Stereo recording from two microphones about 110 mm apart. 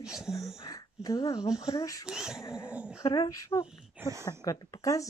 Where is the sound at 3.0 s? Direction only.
35° left (ahead or behind).